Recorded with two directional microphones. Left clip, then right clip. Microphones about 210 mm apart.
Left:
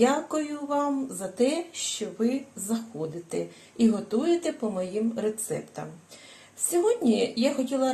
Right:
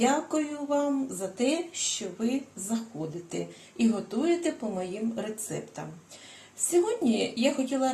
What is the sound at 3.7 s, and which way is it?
A woman's voice, 35° left (ahead or behind).